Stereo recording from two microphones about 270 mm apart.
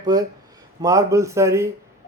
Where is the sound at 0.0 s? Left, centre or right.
Centre.